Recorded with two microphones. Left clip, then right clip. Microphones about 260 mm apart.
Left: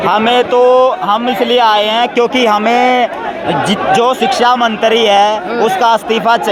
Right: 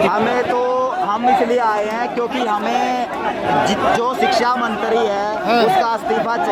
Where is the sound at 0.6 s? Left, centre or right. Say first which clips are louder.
Left 9 dB; left.